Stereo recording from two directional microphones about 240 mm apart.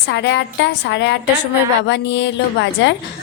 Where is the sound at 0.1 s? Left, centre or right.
Left.